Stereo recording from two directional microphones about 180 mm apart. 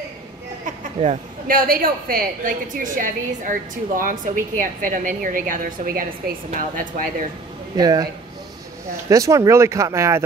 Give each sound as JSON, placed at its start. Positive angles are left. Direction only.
{"t": 0.7, "sound": "a woman's voice", "side_deg": -50}
{"t": 7.7, "sound": "speech", "side_deg": -20}
{"t": 9.1, "sound": "speech", "side_deg": -20}